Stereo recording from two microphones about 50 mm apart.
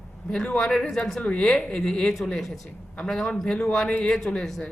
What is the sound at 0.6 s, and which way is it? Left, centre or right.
Speech, centre.